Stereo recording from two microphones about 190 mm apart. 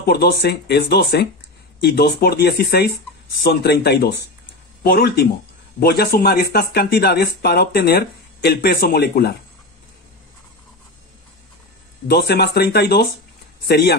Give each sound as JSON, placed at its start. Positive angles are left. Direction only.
{"t": 0.0, "sound": "speech", "side_deg": 55}
{"t": 12.1, "sound": "speech", "side_deg": 60}